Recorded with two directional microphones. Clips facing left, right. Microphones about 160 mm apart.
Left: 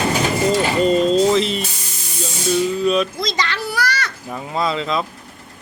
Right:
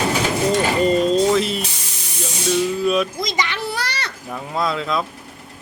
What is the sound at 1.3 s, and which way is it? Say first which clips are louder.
Spray: left 1 dB; 5° right (ahead or behind).